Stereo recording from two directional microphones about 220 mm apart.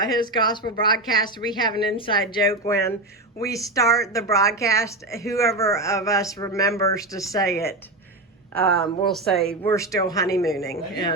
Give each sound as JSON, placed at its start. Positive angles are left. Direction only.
{"t": 0.0, "sound": "a woman's voice", "side_deg": 20}
{"t": 9.0, "sound": "speech", "side_deg": 0}
{"t": 9.6, "sound": "a woman's voice", "side_deg": 15}